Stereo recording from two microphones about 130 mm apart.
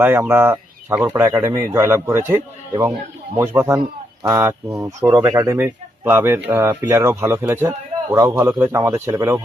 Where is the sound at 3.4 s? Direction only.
20° right (ahead or behind).